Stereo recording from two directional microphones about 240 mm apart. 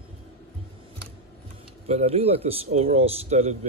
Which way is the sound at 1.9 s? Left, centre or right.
Right.